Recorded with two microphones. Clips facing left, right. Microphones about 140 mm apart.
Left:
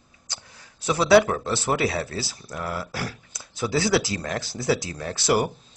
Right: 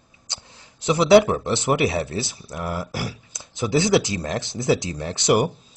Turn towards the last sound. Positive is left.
turn(degrees=-20)  # may be behind; listen again after turning